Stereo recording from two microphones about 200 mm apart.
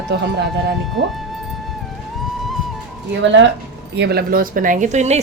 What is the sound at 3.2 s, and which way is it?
Speech, 65° right (ahead or behind).